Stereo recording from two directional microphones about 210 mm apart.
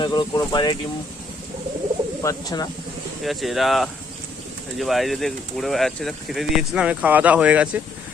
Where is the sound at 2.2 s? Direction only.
15° left (ahead or behind).